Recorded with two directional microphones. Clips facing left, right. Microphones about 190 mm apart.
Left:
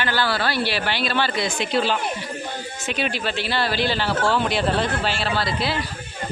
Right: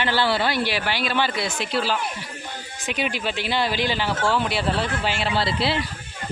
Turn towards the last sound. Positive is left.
turn(degrees=-25)  # may be behind; listen again after turning